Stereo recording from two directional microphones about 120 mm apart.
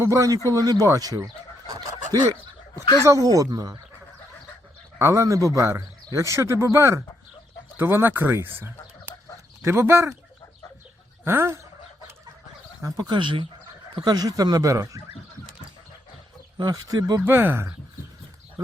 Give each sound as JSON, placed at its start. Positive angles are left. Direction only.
{"t": 0.0, "sound": "a man's voice", "side_deg": -25}
{"t": 3.0, "sound": "a man's voice", "side_deg": -25}
{"t": 4.9, "sound": "a man's voice", "side_deg": -25}
{"t": 11.3, "sound": "a man's voice", "side_deg": -20}
{"t": 12.8, "sound": "speech", "side_deg": -35}
{"t": 16.6, "sound": "speech", "side_deg": -35}
{"t": 17.2, "sound": "a man's voice", "side_deg": -20}